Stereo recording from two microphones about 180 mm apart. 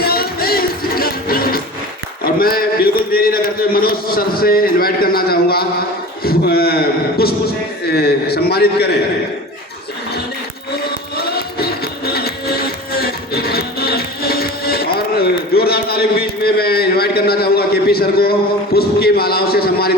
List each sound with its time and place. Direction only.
0.0 s music: 55° left (ahead or behind)
2.2 s a man's voice: 55° left (ahead or behind)
10.8 s music: 60° left (ahead or behind)
15.5 s a sound: 60° left (ahead or behind)